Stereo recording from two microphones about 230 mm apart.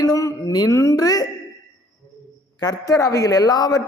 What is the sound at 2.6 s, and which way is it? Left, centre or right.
A man's voice, centre.